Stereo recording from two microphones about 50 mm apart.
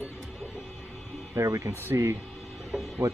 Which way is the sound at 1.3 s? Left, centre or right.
Right.